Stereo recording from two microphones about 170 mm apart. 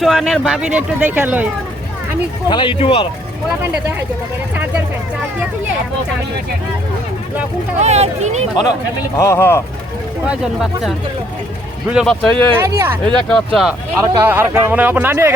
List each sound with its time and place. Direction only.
0.0 s speech: centre (ahead or behind)
2.5 s speech: 30° left (ahead or behind)
7.8 s speech: 40° right (ahead or behind)
9.1 s speech: 15° left (ahead or behind)
10.2 s speech: 5° right (ahead or behind)
12.5 s speech: 15° right (ahead or behind)
13.1 s speech: 5° left (ahead or behind)
14.3 s speech: 10° right (ahead or behind)